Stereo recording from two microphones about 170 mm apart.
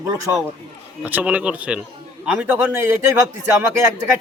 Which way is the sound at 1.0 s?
10° right (ahead or behind).